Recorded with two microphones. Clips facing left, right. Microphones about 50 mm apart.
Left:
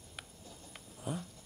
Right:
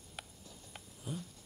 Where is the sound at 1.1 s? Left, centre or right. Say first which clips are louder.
Left 4 dB; left.